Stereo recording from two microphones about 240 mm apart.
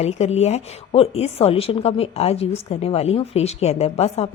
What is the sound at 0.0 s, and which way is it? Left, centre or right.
Speech, left.